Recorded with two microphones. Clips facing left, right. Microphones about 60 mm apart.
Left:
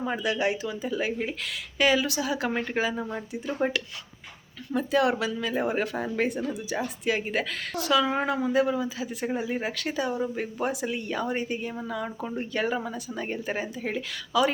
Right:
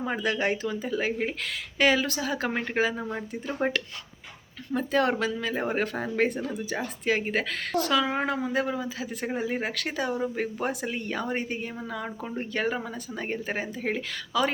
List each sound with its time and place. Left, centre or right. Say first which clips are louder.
0.0 s speech: even; right
0.3 s speech: right 1 dB; right
8.0 s speech: left 2 dB; right